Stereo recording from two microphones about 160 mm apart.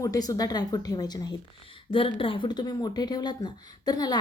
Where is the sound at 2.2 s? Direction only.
30° left (ahead or behind).